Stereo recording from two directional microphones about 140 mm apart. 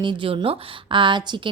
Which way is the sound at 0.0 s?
35° right (ahead or behind).